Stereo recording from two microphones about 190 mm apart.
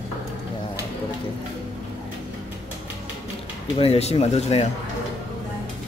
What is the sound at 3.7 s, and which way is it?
Speech, 30° left (ahead or behind).